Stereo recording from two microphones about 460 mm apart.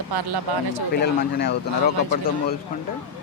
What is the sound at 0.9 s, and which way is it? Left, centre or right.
Speech, left.